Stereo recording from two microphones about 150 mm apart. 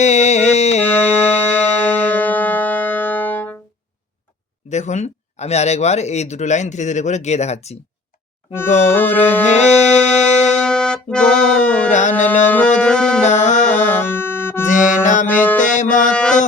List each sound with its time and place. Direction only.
0.0 s a sound: 50° left (ahead or behind)
1.2 s music: 10° left (ahead or behind)
4.7 s speech: 50° left (ahead or behind)
8.5 s music: 15° left (ahead or behind)
9.5 s music: 50° left (ahead or behind)
10.6 s music: 5° left (ahead or behind)
11.9 s speech: 55° left (ahead or behind)
12.5 s music: 10° left (ahead or behind)
13.2 s speech: 50° left (ahead or behind)
13.7 s music: 15° left (ahead or behind)
14.8 s music: 60° left (ahead or behind)
15.4 s music: 10° left (ahead or behind)
15.6 s music: 55° left (ahead or behind)